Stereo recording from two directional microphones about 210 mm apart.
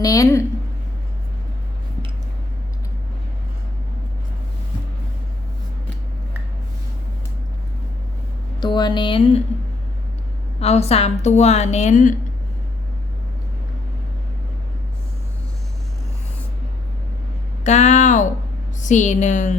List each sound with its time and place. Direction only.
0.0 s a woman's voice: 15° left (ahead or behind)
8.6 s a sound: 20° left (ahead or behind)
10.6 s a woman's voice: 30° left (ahead or behind)
17.6 s a woman's voice: 35° left (ahead or behind)